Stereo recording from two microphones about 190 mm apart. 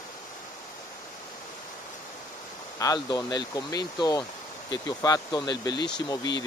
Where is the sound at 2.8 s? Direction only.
20° left (ahead or behind).